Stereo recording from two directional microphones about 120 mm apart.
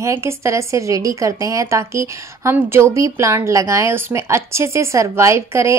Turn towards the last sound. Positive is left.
turn(degrees=-25)  # may be behind; listen again after turning